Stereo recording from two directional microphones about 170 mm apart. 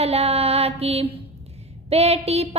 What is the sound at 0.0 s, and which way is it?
Child singing, 35° right (ahead or behind).